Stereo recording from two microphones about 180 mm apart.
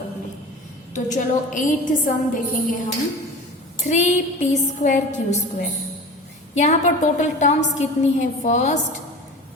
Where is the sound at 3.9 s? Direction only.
40° left (ahead or behind).